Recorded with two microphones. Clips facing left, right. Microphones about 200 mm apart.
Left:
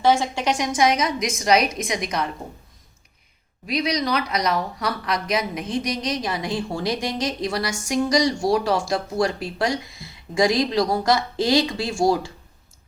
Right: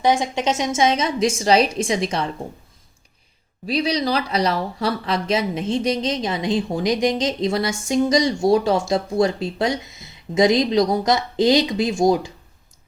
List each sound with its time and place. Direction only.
0.0 s speech: 15° right (ahead or behind)
3.7 s speech: 30° right (ahead or behind)